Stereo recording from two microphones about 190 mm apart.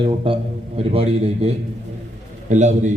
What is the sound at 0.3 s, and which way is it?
A man's voice, 30° right (ahead or behind).